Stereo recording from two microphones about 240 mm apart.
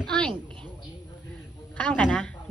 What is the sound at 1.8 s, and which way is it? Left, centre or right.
Speech, centre.